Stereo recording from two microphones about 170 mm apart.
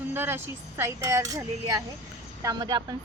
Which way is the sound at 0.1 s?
15° right (ahead or behind).